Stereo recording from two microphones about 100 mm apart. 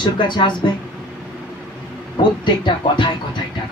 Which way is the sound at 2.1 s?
50° left (ahead or behind).